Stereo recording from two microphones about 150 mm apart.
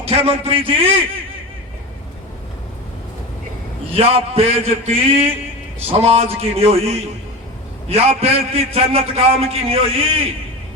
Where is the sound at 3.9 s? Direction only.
40° right (ahead or behind).